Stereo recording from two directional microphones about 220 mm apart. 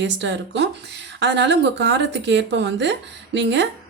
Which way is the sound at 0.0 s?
55° right (ahead or behind).